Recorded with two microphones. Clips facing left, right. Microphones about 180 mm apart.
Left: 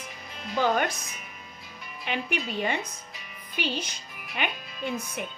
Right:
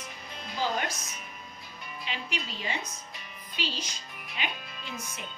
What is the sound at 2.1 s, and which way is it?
A woman's voice, 55° left (ahead or behind).